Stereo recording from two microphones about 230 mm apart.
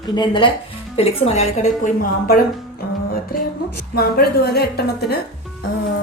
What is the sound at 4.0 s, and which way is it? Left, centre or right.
Speech, left.